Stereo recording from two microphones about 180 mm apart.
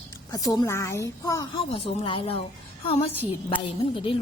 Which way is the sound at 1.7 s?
30° left (ahead or behind).